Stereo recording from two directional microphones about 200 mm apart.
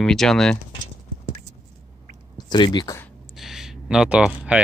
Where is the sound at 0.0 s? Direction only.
Centre (ahead or behind).